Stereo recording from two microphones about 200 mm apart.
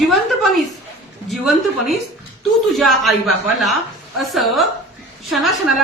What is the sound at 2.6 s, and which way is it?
A woman's voice, centre (ahead or behind).